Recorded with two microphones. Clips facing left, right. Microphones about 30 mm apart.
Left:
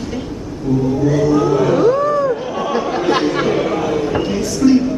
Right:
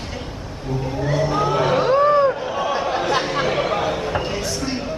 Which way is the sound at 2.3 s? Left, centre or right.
Centre.